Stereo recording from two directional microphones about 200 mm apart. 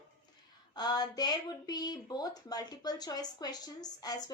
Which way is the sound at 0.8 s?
20° left (ahead or behind).